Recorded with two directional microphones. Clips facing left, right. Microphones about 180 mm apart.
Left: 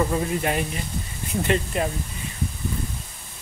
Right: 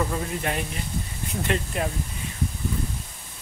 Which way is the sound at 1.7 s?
Centre (ahead or behind).